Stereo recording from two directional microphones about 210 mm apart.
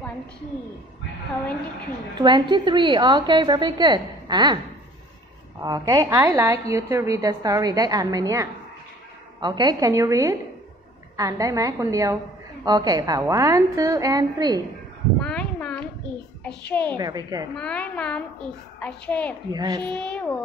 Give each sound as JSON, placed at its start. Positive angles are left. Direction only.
{"t": 2.1, "sound": "a woman's voice", "side_deg": -20}
{"t": 5.6, "sound": "a woman's voice", "side_deg": -20}
{"t": 15.1, "sound": "a sound", "side_deg": 5}
{"t": 16.4, "sound": "a woman's voice", "side_deg": 5}
{"t": 16.9, "sound": "a woman's voice", "side_deg": -20}
{"t": 17.6, "sound": "a woman's voice", "side_deg": 5}
{"t": 19.5, "sound": "a woman's voice", "side_deg": -20}
{"t": 19.8, "sound": "a woman's voice", "side_deg": 5}